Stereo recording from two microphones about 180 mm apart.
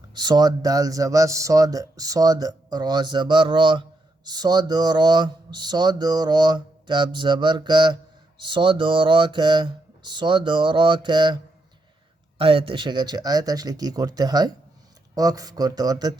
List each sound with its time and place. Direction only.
0.1 s speech: 25° right (ahead or behind)
12.4 s speech: 30° right (ahead or behind)